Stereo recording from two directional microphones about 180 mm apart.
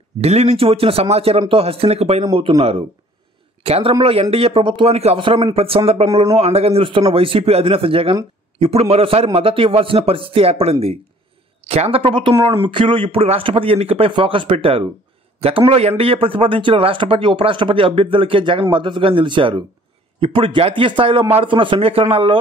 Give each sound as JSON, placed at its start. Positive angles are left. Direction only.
{"t": 0.2, "sound": "a man's voice", "side_deg": -35}